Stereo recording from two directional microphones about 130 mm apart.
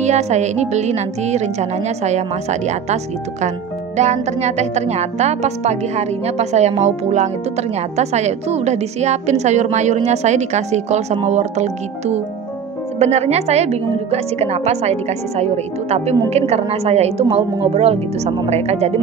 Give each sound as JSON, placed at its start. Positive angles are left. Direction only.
{"t": 0.0, "sound": "speech", "side_deg": -60}